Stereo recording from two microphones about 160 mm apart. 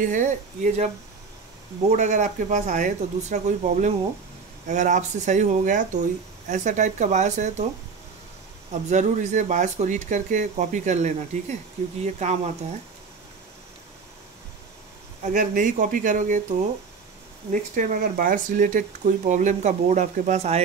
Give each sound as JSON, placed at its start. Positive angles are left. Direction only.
{"t": 0.0, "sound": "speech", "side_deg": -50}
{"t": 1.9, "sound": "speech", "side_deg": -45}
{"t": 8.8, "sound": "speech", "side_deg": -45}
{"t": 15.3, "sound": "speech", "side_deg": -55}
{"t": 17.5, "sound": "speech", "side_deg": -55}